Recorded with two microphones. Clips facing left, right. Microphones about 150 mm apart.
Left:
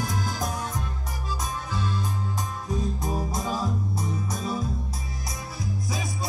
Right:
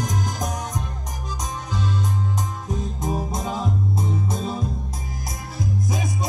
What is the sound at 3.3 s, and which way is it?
Music, 20° right (ahead or behind).